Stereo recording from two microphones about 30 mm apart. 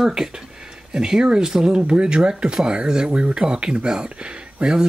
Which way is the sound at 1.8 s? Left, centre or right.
Right.